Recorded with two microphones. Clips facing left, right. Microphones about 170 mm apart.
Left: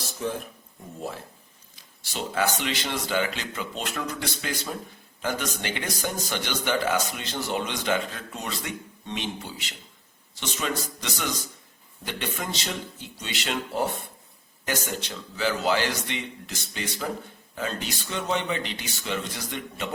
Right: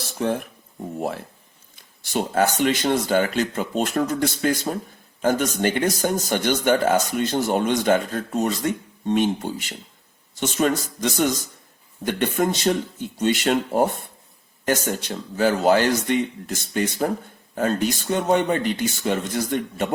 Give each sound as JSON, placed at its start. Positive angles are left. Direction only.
{"t": 0.2, "sound": "speech", "side_deg": -65}
{"t": 1.7, "sound": "speech", "side_deg": -50}